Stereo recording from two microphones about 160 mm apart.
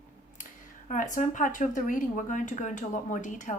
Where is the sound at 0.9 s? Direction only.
55° left (ahead or behind).